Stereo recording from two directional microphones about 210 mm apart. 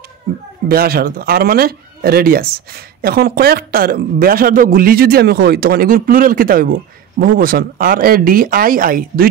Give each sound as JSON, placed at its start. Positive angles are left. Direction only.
{"t": 0.7, "sound": "speech", "side_deg": -45}